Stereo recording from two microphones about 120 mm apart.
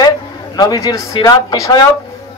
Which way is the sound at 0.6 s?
30° left (ahead or behind).